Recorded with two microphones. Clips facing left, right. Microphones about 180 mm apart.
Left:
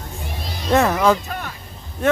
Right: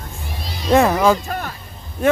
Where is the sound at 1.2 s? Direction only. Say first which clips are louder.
Right 4 dB; 45° right (ahead or behind).